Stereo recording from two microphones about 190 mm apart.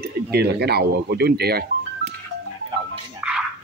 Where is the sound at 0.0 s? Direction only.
55° right (ahead or behind).